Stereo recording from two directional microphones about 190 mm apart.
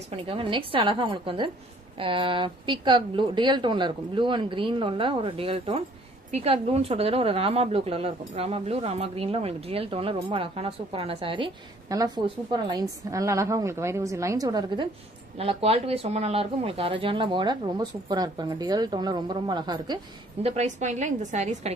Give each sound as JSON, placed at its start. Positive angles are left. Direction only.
{"t": 0.1, "sound": "speech", "side_deg": -30}
{"t": 15.3, "sound": "speech", "side_deg": -30}
{"t": 20.4, "sound": "a woman's voice", "side_deg": -40}